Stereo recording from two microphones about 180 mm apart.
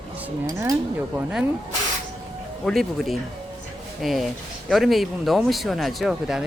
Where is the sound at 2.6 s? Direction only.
Centre (ahead or behind).